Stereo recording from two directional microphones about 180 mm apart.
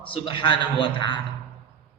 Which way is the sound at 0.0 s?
25° left (ahead or behind).